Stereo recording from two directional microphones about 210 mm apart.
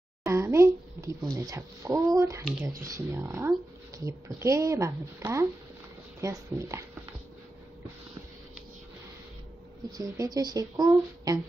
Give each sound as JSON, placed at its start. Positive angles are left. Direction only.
{"t": 0.3, "sound": "speech", "side_deg": -15}
{"t": 9.9, "sound": "speech", "side_deg": -15}